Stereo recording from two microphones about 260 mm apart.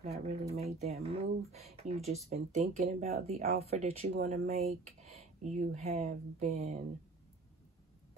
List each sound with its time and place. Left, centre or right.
0.0 s speech: right